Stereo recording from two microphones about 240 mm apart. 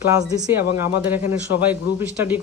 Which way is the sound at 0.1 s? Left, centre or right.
Centre.